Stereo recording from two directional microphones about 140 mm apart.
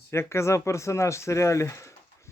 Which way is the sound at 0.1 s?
20° left (ahead or behind).